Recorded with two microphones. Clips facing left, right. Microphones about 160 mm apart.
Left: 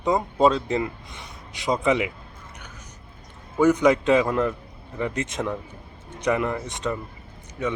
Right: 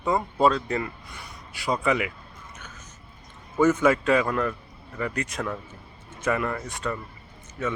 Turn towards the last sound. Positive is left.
turn(degrees=15)  # may be behind; listen again after turning